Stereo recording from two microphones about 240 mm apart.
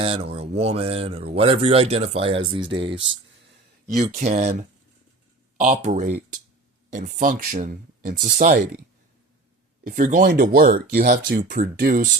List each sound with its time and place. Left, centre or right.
0.0 s speech: right
5.5 s speech: right
9.8 s speech: right